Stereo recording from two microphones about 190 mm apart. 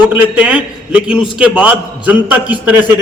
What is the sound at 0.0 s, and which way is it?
A man's voice, 5° right (ahead or behind).